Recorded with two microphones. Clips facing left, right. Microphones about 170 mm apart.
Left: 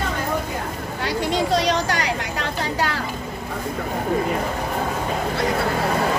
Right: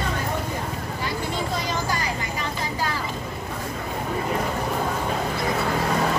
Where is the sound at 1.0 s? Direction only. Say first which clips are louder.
Left 7 dB; 80° left.